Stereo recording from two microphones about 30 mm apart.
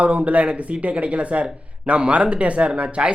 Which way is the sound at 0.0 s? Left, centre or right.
Right.